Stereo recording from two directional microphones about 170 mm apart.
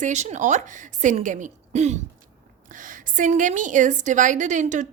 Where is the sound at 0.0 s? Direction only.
45° right (ahead or behind).